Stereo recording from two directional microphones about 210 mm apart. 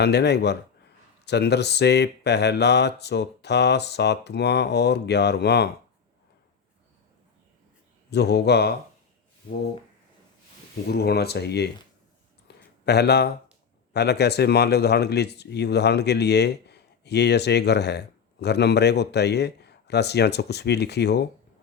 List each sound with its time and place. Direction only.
0.0 s speech: 50° left (ahead or behind)
8.1 s speech: 50° left (ahead or behind)
10.8 s speech: 50° left (ahead or behind)
12.5 s a sound: 50° left (ahead or behind)
12.8 s speech: 50° left (ahead or behind)